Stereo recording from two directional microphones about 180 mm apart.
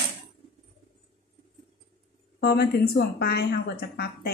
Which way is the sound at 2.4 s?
65° left (ahead or behind).